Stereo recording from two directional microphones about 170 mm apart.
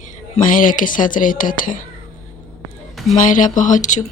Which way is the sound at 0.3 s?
50° left (ahead or behind).